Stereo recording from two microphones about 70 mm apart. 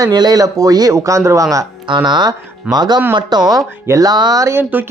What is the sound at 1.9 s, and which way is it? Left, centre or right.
Speech, right.